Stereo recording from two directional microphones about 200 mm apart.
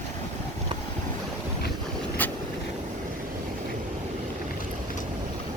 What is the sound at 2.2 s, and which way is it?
Vehicle, 10° left (ahead or behind).